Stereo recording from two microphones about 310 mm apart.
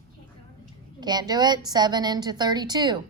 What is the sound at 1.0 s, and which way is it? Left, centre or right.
A woman's voice, centre.